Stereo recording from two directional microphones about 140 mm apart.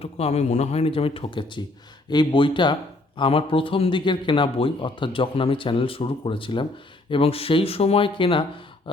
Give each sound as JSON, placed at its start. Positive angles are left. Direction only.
{"t": 0.0, "sound": "speech", "side_deg": 50}